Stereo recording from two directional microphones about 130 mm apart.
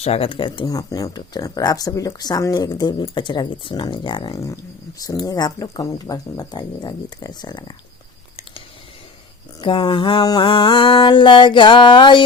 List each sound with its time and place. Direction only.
0.0 s speech: 50° left (ahead or behind)
4.4 s speech: 25° left (ahead or behind)
9.6 s speech: 35° left (ahead or behind)